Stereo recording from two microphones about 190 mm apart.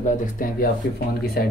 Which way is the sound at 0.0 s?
45° left (ahead or behind).